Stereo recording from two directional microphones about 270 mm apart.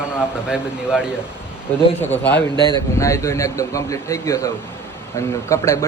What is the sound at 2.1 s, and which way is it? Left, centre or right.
Speech, centre.